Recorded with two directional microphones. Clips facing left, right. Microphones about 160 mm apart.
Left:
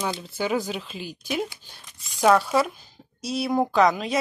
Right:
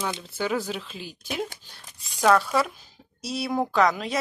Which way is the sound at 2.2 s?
20° left (ahead or behind).